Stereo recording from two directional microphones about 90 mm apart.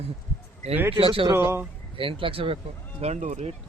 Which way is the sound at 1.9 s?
80° right.